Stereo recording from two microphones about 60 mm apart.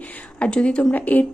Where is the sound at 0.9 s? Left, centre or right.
Left.